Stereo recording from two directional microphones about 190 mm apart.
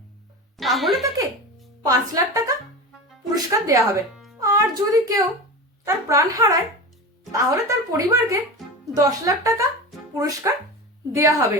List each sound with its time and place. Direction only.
0.5 s speech: centre (ahead or behind)
1.8 s a woman's voice: 15° right (ahead or behind)